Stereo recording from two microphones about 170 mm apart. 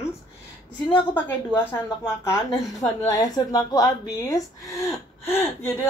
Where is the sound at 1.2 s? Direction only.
10° left (ahead or behind).